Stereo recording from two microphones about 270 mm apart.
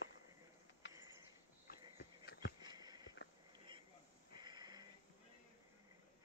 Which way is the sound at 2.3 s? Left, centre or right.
Left.